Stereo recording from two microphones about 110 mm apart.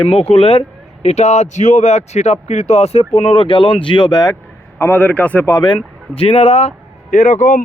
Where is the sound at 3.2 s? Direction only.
45° left (ahead or behind).